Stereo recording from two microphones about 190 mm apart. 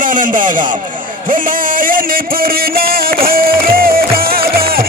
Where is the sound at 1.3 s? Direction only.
45° right (ahead or behind).